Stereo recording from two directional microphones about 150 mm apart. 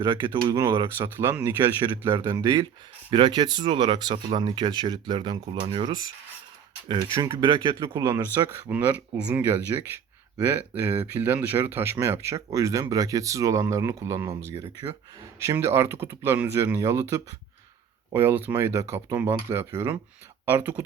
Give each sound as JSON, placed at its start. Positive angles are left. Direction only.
{"t": 0.0, "sound": "speech", "side_deg": -30}
{"t": 0.5, "sound": "speech", "side_deg": -20}
{"t": 2.1, "sound": "speech", "side_deg": -25}
{"t": 8.7, "sound": "speech", "side_deg": -10}
{"t": 9.7, "sound": "speech", "side_deg": -20}